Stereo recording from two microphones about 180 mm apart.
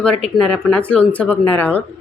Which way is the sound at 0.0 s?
5° left (ahead or behind).